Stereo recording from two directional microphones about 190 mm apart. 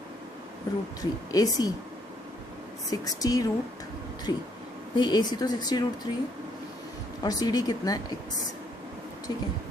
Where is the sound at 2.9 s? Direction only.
20° left (ahead or behind).